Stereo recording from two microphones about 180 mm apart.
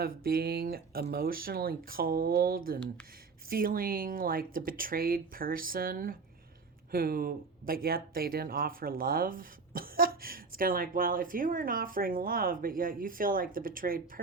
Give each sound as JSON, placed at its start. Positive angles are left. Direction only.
{"t": 0.0, "sound": "speech", "side_deg": -55}